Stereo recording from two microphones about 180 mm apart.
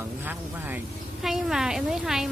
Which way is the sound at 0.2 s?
10° right (ahead or behind).